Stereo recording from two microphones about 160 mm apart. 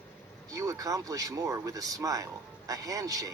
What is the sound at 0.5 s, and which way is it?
Speech, 20° right (ahead or behind).